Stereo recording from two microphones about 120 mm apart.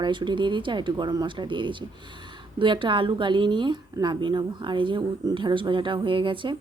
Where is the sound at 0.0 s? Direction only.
40° right (ahead or behind).